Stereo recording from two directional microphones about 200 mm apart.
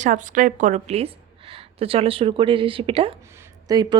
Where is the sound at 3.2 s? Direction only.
15° right (ahead or behind).